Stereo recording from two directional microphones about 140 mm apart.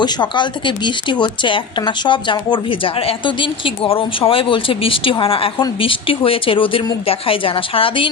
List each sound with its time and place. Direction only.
0.0 s a woman's voice: 35° left (ahead or behind)